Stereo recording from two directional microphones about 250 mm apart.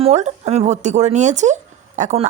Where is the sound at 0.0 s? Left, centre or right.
Right.